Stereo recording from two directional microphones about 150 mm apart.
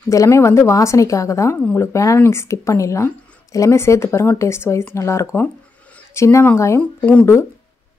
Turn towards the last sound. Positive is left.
turn(degrees=15)  # may be behind; listen again after turning